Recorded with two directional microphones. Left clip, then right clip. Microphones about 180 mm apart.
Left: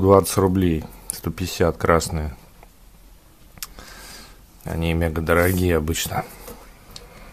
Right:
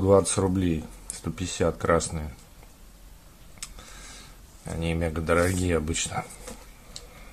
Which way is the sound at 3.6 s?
30° left (ahead or behind).